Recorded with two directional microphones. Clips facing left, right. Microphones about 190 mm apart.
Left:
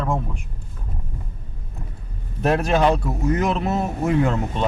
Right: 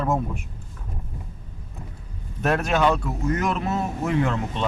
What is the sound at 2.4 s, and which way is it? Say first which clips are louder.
Speech: left 3 dB; 30° left (ahead or behind).